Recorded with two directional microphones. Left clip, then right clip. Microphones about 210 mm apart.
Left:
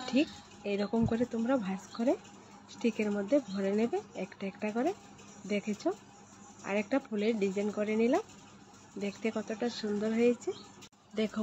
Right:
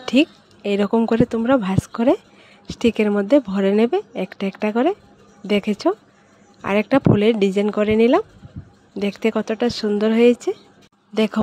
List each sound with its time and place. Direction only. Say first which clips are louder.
0.0 s speech: right 13 dB; 60° right (ahead or behind)